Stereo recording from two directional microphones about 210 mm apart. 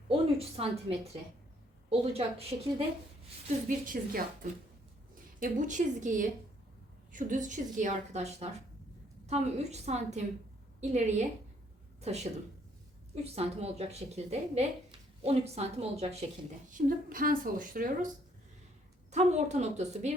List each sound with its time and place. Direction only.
0.1 s a woman's voice: 30° right (ahead or behind)
3.7 s speech: 40° right (ahead or behind)
5.4 s a woman's voice: 35° right (ahead or behind)
16.7 s speech: 40° right (ahead or behind)
19.1 s speech: 35° right (ahead or behind)